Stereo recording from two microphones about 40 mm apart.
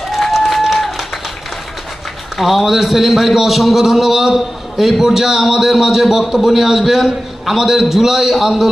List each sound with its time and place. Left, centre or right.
0.3 s applause: centre
2.4 s a man's voice: centre